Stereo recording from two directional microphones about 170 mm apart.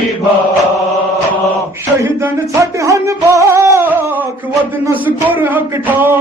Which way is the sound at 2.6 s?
20° right (ahead or behind).